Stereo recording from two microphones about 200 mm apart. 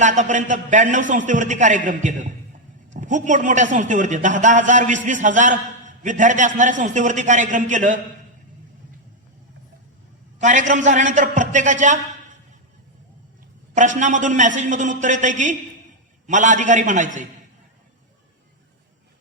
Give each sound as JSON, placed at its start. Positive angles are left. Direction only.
{"t": 0.0, "sound": "a man's voice", "side_deg": -40}
{"t": 10.4, "sound": "a man's voice", "side_deg": -40}
{"t": 13.7, "sound": "a man's voice", "side_deg": -40}